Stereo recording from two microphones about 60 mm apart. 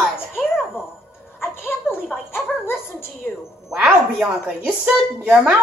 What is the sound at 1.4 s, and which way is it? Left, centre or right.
Music, left.